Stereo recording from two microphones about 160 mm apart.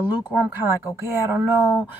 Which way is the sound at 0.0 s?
10° right (ahead or behind).